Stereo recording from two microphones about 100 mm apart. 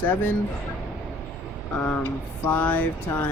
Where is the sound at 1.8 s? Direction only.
20° left (ahead or behind).